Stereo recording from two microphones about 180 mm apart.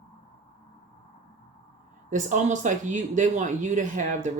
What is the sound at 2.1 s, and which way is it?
Speech, 45° right (ahead or behind).